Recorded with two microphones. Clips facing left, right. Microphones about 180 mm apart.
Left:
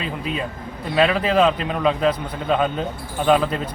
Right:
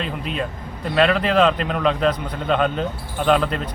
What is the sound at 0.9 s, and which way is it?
A man's voice, 5° left (ahead or behind).